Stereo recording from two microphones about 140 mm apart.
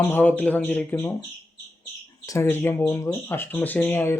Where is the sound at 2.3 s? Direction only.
15° left (ahead or behind).